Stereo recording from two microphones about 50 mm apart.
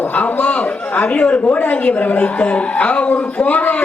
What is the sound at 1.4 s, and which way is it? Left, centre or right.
A woman's voice, left.